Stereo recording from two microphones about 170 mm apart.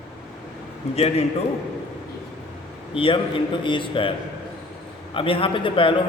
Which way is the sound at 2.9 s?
30° left (ahead or behind).